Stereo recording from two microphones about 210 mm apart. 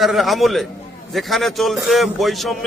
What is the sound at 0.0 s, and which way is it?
A man's voice, centre (ahead or behind).